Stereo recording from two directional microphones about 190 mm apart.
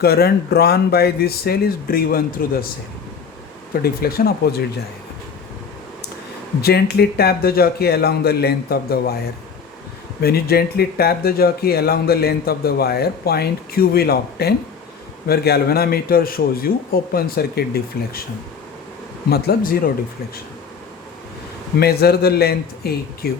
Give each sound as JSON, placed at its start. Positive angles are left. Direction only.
{"t": 0.0, "sound": "speech", "side_deg": 55}
{"t": 3.7, "sound": "a man's voice", "side_deg": 50}
{"t": 6.6, "sound": "speech", "side_deg": 55}
{"t": 10.2, "sound": "a man's voice", "side_deg": 55}
{"t": 19.3, "sound": "a man's voice", "side_deg": 50}
{"t": 21.8, "sound": "speech", "side_deg": 55}